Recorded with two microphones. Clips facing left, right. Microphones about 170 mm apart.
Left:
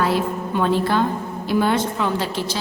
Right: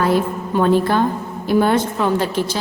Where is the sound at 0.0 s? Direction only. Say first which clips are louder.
Right 3 dB; 45° right (ahead or behind).